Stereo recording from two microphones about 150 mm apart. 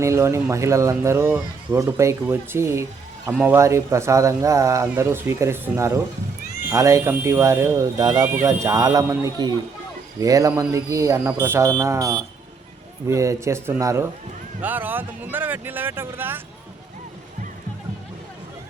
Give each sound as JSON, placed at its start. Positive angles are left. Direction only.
{"t": 0.0, "sound": "speech", "side_deg": -20}